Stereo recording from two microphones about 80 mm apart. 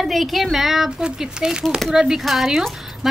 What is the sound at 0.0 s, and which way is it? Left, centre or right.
A woman's voice, centre.